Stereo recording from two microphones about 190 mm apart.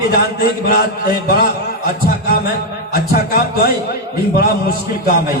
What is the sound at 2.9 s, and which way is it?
A man's voice, 55° left (ahead or behind).